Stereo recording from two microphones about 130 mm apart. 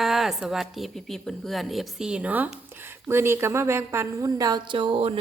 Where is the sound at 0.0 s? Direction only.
Centre (ahead or behind).